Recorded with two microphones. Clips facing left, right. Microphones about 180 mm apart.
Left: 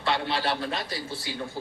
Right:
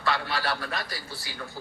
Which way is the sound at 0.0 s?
25° left (ahead or behind).